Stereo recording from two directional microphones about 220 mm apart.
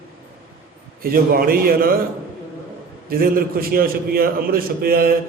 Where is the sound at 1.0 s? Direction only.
40° right (ahead or behind).